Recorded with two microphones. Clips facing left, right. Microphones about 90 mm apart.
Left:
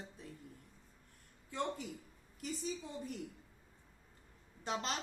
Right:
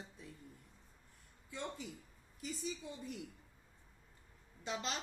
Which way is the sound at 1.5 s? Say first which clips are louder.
Left 6 dB; 55° left (ahead or behind).